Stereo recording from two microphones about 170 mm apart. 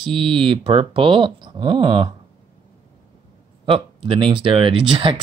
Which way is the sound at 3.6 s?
30° right (ahead or behind).